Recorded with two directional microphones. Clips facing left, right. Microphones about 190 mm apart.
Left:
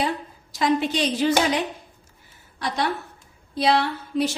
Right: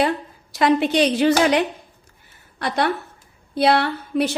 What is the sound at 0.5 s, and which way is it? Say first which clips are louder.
A woman's voice: right 5 dB; 65° right (ahead or behind).